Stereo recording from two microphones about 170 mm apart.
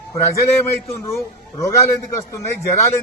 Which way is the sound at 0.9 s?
15° left (ahead or behind).